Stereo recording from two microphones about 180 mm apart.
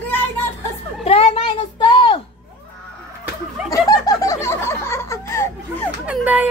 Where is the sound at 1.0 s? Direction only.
35° left (ahead or behind).